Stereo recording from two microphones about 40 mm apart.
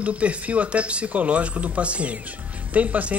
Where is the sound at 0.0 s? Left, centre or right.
Right.